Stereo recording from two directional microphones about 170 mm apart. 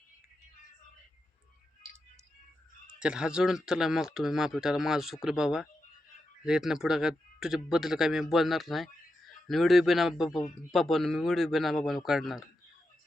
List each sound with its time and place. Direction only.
3.0 s speech: 5° right (ahead or behind)